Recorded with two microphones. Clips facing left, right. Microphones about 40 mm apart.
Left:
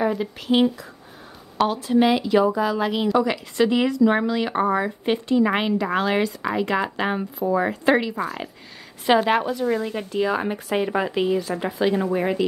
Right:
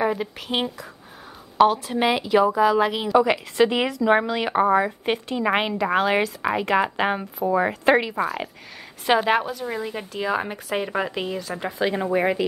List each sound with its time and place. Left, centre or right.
0.0 s a woman's voice: centre
3.3 s a woman's voice: centre
4.6 s a woman's voice: centre
11.9 s speech: right